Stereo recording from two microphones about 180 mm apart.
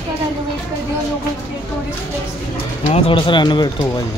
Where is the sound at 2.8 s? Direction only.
30° left (ahead or behind).